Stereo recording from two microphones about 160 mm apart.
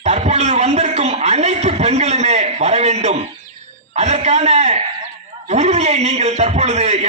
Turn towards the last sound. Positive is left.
turn(degrees=-40)  # may be behind; listen again after turning